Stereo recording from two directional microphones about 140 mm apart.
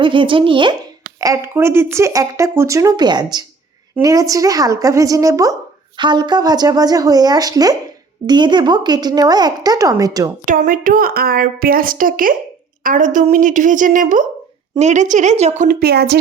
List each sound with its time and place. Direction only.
0.0 s speech: 35° right (ahead or behind)
1.2 s speech: 20° right (ahead or behind)
10.4 s a woman's voice: 75° right (ahead or behind)
12.8 s a woman's voice: 70° right (ahead or behind)
14.8 s a woman's voice: 60° right (ahead or behind); by 16.0 s 90° right